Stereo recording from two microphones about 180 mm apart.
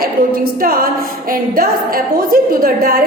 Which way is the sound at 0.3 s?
55° right (ahead or behind).